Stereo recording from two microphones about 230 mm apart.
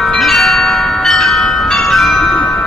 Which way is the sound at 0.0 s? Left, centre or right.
Centre.